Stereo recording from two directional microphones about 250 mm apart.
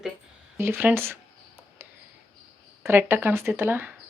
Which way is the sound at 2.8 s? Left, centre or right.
Centre.